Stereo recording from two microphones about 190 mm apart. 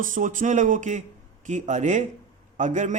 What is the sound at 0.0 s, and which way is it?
A man's voice, 45° right (ahead or behind).